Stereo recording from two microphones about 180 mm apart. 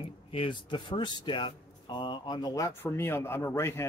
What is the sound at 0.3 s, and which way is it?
Speech, 30° left (ahead or behind).